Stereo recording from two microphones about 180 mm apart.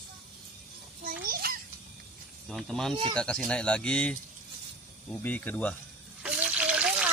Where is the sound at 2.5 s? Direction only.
Centre (ahead or behind).